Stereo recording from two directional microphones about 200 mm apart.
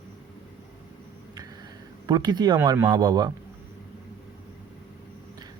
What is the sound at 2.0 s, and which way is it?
Speech, 20° right (ahead or behind).